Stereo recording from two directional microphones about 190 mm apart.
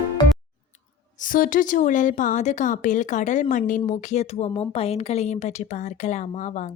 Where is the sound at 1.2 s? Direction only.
45° left (ahead or behind).